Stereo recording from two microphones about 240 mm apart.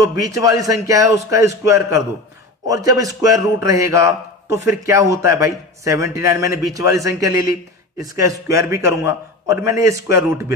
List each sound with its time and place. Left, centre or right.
0.0 s speech: centre